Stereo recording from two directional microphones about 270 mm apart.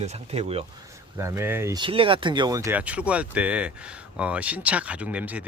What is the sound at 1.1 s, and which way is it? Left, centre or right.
Speech, centre.